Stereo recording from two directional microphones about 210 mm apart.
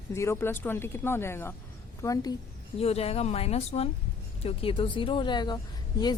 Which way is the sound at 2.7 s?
30° left (ahead or behind).